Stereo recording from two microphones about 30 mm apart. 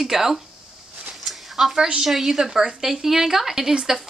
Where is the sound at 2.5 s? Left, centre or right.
Centre.